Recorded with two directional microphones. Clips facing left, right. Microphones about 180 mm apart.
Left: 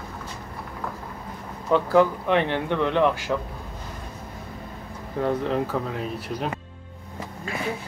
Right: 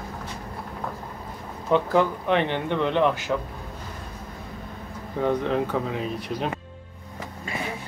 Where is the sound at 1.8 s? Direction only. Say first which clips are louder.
Left 2 dB; 5° left (ahead or behind).